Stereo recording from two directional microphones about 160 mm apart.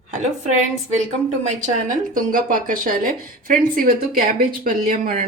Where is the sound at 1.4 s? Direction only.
50° right (ahead or behind).